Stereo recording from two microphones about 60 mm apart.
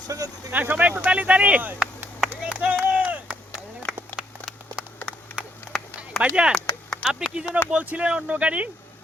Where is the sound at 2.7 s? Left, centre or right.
Right.